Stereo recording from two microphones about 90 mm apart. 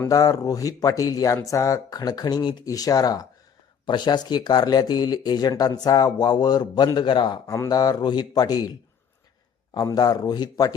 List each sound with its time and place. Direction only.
0.1 s speech: 40° left (ahead or behind)
2.6 s speech: 45° left (ahead or behind)
3.8 s speech: 55° left (ahead or behind)
7.4 s speech: 35° left (ahead or behind)
9.7 s speech: 45° left (ahead or behind)